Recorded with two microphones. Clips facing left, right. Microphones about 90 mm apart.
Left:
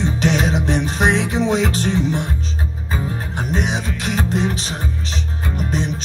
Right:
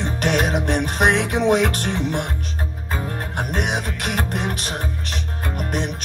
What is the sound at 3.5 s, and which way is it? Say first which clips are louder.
Music: left 3 dB; 60° right (ahead or behind).